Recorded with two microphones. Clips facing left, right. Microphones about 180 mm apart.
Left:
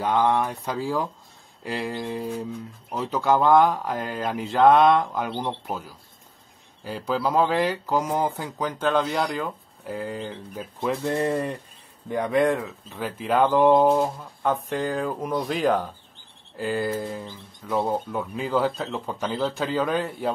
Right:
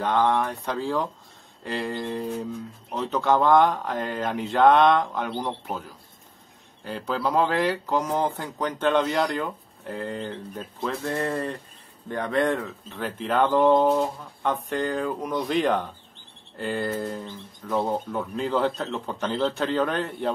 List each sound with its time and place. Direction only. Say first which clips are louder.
0.0 s speech: left 1 dB; 5° left (ahead or behind)
11.1 s speech: left 2 dB; 15° left (ahead or behind)